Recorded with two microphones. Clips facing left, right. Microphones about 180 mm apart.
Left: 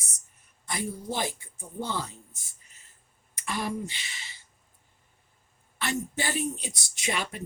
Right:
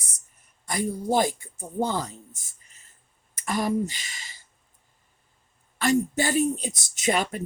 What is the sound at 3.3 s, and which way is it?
Speech, 40° right (ahead or behind).